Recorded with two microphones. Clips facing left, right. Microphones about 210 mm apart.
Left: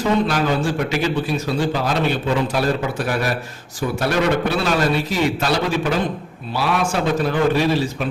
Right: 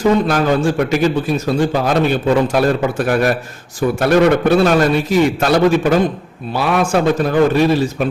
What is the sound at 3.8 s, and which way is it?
A man's voice, 50° right (ahead or behind).